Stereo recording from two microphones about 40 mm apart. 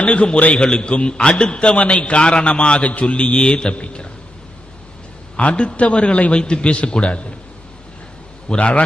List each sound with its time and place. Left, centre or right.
0.0 s a man's voice: left
0.6 s a man's voice: left
5.4 s a man's voice: left
8.4 s a man's voice: left